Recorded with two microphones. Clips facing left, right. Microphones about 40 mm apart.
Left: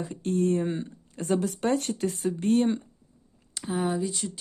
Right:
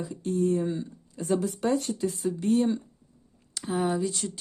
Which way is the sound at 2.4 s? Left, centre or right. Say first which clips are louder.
Left 1 dB; left.